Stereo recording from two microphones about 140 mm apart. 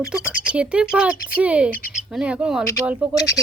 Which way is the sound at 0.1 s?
10° right (ahead or behind).